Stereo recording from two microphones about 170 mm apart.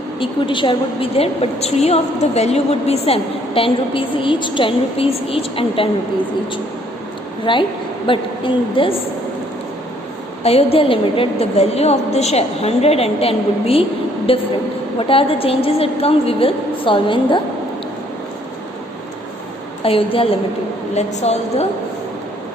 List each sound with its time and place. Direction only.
0.2 s a woman's voice: 30° left (ahead or behind)
7.5 s a woman's voice: 30° left (ahead or behind)
10.4 s a woman's voice: 35° left (ahead or behind)
19.8 s a woman's voice: 35° left (ahead or behind)